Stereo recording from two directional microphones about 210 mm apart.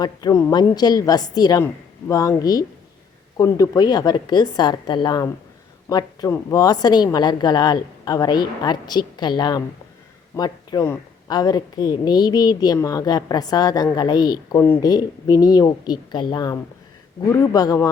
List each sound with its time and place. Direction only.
0.0 s a woman's voice: 15° left (ahead or behind)